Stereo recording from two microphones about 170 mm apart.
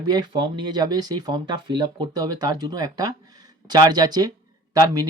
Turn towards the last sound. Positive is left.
turn(degrees=-20)  # may be behind; listen again after turning